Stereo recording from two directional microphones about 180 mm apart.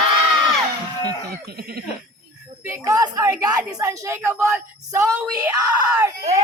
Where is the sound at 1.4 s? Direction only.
60° right (ahead or behind).